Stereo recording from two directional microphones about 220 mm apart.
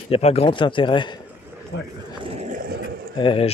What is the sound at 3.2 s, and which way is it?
Speech, 25° left (ahead or behind).